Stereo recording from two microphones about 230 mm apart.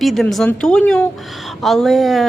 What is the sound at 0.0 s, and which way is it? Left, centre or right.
A woman's voice, centre.